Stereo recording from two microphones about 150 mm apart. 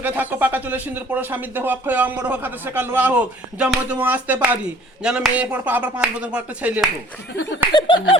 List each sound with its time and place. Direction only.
0.0 s speech: 10° right (ahead or behind)
7.7 s speech: 30° left (ahead or behind)